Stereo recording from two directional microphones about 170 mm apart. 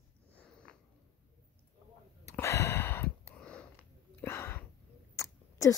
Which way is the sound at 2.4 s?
15° left (ahead or behind).